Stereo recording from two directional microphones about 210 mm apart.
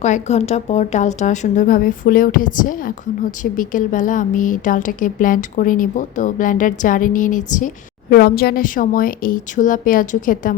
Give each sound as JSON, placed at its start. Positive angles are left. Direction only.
{"t": 0.0, "sound": "speech", "side_deg": 30}